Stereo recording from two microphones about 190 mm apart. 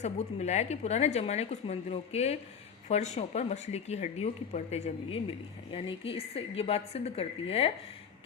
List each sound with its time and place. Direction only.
0.0 s a woman's voice: 35° left (ahead or behind)